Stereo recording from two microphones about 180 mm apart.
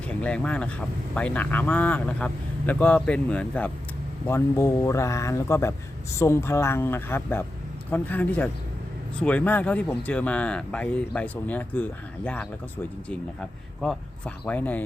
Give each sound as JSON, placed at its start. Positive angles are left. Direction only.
{"t": 0.1, "sound": "speech", "side_deg": 5}
{"t": 13.8, "sound": "speech", "side_deg": 5}